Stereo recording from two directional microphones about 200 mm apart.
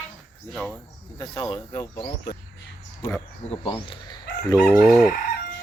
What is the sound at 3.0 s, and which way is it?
Speech, 15° left (ahead or behind).